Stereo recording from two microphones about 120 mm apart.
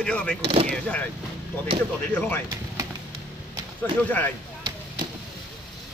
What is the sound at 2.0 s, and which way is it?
Speech, 10° left (ahead or behind).